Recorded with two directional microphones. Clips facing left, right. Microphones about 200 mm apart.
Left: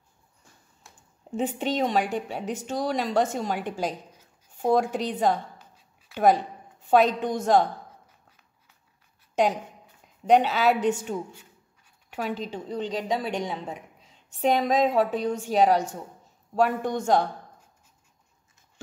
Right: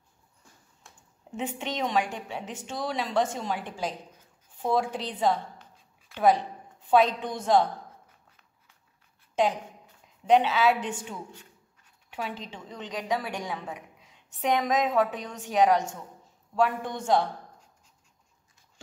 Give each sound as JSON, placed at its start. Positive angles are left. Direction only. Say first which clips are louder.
{"t": 1.4, "sound": "a woman's voice", "louder": "left 5 dB", "side_deg": 35}
{"t": 10.2, "sound": "a woman's voice", "louder": "left 2 dB", "side_deg": 40}
{"t": 12.1, "sound": "a woman's voice", "louder": "left 5 dB", "side_deg": 45}